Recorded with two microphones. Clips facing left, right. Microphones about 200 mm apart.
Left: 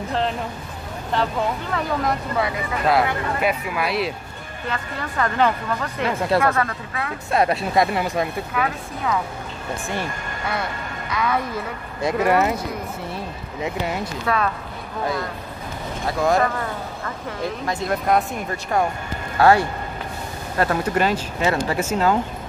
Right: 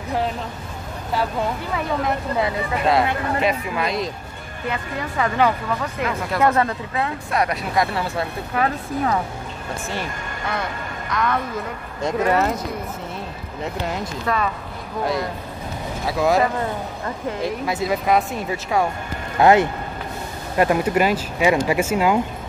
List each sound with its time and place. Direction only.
1.1 s speech: 10° right (ahead or behind)
2.3 s speech: 25° right (ahead or behind)
3.3 s speech: 5° left (ahead or behind)
4.6 s speech: 10° right (ahead or behind)
6.4 s speech: 25° right (ahead or behind)
7.2 s speech: 25° left (ahead or behind)
8.5 s speech: 40° right (ahead or behind)
11.1 s speech: 10° left (ahead or behind)
13.6 s speech: 5° left (ahead or behind)
16.1 s speech: 5° right (ahead or behind)
17.6 s speech: 5° right (ahead or behind)
19.3 s speech: 20° right (ahead or behind)